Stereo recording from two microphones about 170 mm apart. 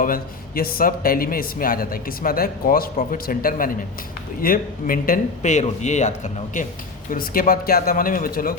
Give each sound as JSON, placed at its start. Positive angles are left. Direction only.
{"t": 0.0, "sound": "speech", "side_deg": 55}